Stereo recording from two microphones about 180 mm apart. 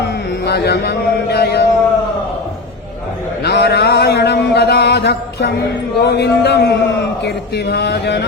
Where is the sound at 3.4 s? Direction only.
65° left (ahead or behind).